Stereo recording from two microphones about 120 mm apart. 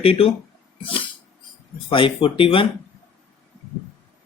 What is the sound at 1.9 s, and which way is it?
Speech, 45° left (ahead or behind).